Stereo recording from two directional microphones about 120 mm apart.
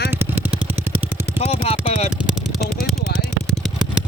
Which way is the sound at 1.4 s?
65° left (ahead or behind).